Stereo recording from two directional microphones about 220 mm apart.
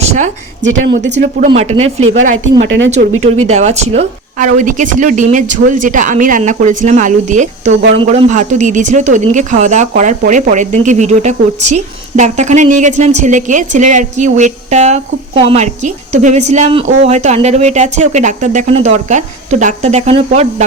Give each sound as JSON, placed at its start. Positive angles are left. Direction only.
{"t": 0.0, "sound": "a sound", "side_deg": -30}
{"t": 1.5, "sound": "speech", "side_deg": -25}
{"t": 2.6, "sound": "speech", "side_deg": -55}
{"t": 3.2, "sound": "speech", "side_deg": -30}